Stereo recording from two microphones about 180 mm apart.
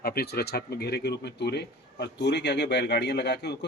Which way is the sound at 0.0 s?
60° left (ahead or behind).